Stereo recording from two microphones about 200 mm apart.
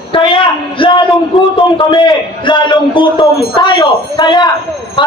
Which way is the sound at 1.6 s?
25° left (ahead or behind).